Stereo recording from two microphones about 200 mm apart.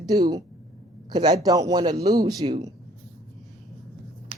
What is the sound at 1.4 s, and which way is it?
Speech, 20° right (ahead or behind).